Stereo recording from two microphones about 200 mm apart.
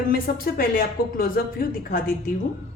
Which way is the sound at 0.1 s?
45° left (ahead or behind).